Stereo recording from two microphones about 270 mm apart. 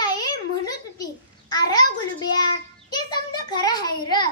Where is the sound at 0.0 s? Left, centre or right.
Centre.